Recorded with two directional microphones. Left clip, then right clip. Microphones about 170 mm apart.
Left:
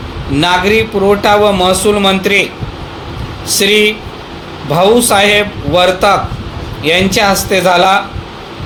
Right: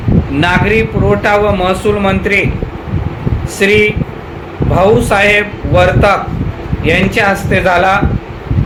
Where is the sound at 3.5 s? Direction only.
50° left (ahead or behind).